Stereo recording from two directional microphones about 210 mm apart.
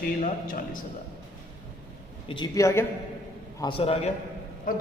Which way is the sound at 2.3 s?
20° left (ahead or behind).